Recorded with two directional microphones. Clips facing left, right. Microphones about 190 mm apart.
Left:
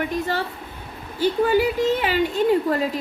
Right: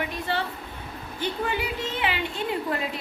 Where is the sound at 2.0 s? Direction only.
40° left (ahead or behind).